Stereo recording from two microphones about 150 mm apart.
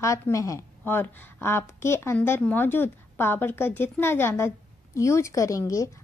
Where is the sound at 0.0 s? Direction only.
20° left (ahead or behind).